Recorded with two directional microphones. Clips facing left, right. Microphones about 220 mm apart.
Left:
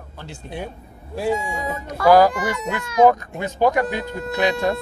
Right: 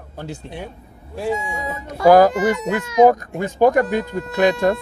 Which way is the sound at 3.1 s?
45° right (ahead or behind).